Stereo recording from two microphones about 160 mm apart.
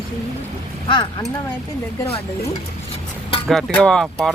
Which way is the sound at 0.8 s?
30° left (ahead or behind).